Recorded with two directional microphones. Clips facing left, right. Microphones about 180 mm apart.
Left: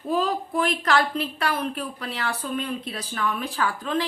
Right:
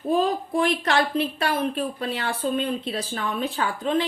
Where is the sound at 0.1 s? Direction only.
25° right (ahead or behind).